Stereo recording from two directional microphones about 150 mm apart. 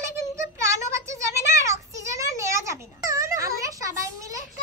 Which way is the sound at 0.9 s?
20° right (ahead or behind).